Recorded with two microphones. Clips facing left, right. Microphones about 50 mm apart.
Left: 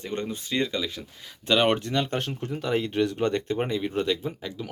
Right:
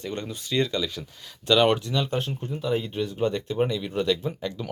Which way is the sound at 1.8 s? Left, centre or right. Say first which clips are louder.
Even; left.